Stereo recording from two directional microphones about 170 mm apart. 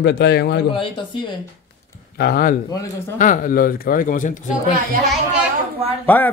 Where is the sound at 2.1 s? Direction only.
65° left (ahead or behind).